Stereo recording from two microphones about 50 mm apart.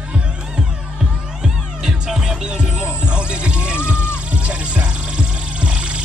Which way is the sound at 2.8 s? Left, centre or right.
Right.